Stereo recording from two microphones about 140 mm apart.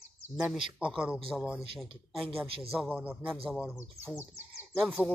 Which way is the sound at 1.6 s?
40° right (ahead or behind).